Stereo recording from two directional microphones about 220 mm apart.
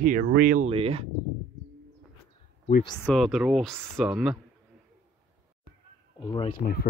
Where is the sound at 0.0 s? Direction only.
40° right (ahead or behind).